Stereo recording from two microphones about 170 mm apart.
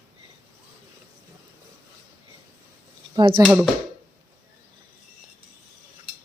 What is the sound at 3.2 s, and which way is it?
Speech, 30° right (ahead or behind).